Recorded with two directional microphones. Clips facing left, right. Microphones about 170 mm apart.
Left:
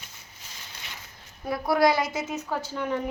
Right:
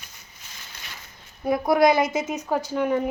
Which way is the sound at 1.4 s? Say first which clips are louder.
Right 4 dB; 20° right (ahead or behind).